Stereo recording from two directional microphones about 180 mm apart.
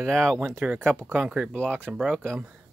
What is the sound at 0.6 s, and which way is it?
Speech, 10° right (ahead or behind).